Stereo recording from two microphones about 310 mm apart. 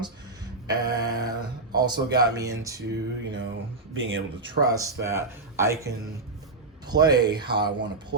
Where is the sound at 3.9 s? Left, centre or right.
Right.